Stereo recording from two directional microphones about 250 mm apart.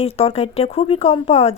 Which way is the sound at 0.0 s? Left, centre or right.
Left.